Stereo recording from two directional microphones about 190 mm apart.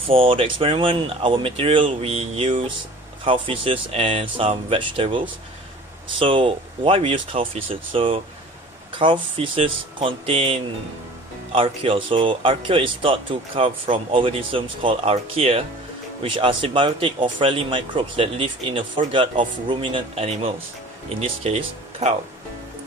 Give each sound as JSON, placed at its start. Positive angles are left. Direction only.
{"t": 0.0, "sound": "speech", "side_deg": -30}